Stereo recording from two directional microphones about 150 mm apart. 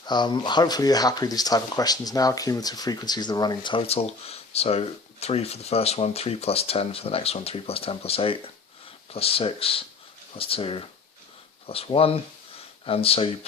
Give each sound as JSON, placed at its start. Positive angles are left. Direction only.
{"t": 0.0, "sound": "speech", "side_deg": 30}